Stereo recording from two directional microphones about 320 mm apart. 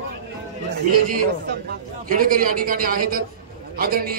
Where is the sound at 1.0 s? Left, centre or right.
Right.